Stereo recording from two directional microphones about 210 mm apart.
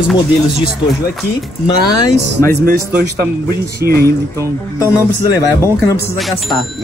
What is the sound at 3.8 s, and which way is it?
Speech, 50° right (ahead or behind).